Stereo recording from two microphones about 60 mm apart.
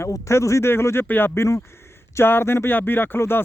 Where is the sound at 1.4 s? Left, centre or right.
Left.